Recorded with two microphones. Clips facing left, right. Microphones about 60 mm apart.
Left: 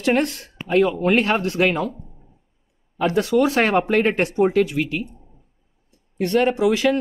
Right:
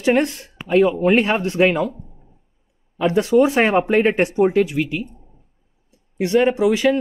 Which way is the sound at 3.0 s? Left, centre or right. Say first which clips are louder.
Right 3 dB; right.